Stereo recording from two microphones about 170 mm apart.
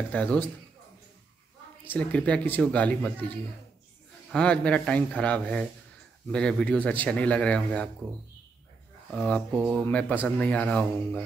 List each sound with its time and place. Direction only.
0.1 s a man's voice: 5° left (ahead or behind)
1.9 s a man's voice: 10° left (ahead or behind)
4.3 s a man's voice: 5° left (ahead or behind)
9.1 s a man's voice: 5° left (ahead or behind)